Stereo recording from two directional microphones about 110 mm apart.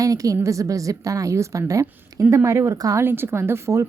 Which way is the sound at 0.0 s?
30° right (ahead or behind).